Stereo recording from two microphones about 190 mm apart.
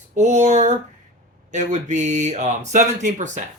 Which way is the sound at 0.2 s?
40° right (ahead or behind).